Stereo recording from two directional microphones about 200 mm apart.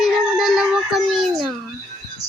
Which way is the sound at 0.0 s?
Centre (ahead or behind).